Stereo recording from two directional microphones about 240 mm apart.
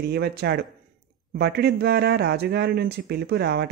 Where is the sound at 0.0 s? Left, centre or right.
Right.